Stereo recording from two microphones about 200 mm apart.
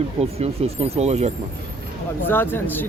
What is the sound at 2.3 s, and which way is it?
Speech, 10° left (ahead or behind).